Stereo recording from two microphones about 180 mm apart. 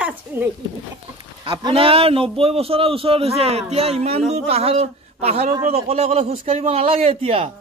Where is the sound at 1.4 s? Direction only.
30° right (ahead or behind).